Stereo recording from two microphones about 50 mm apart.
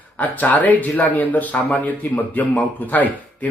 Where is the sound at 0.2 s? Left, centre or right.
Left.